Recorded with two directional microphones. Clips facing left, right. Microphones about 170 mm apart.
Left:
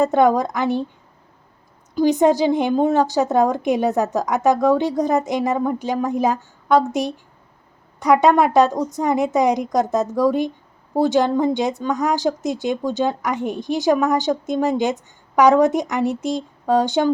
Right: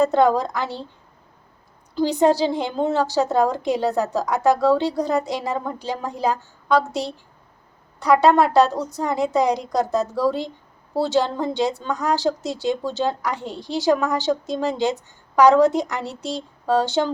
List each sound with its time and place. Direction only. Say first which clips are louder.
0.0 s a woman's voice: left 1 dB; 15° left (ahead or behind)
2.0 s a woman's voice: left 2 dB; 20° left (ahead or behind)